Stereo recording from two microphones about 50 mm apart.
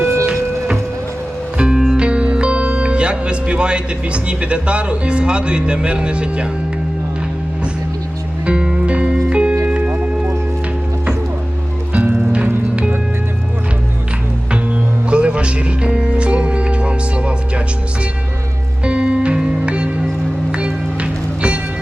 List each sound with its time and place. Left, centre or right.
0.0 s music: right
1.5 s music: centre
2.0 s speech: right
8.4 s music: right
12.1 s music: right
14.5 s music: right
18.9 s music: right